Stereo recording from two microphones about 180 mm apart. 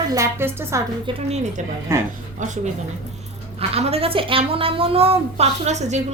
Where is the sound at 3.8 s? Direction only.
35° right (ahead or behind).